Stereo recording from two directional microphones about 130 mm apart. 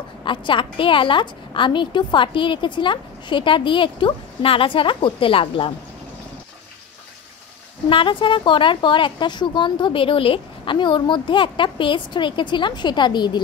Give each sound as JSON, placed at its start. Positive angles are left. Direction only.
{"t": 0.2, "sound": "a woman's voice", "side_deg": 40}
{"t": 7.9, "sound": "a woman's voice", "side_deg": 40}